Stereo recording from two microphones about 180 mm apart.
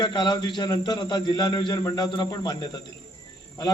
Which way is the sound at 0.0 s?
25° left (ahead or behind).